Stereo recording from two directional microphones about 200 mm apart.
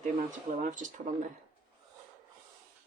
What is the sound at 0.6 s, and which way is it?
Speech, 40° right (ahead or behind).